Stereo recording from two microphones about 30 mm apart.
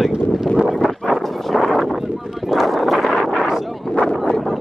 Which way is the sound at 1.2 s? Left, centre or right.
Centre.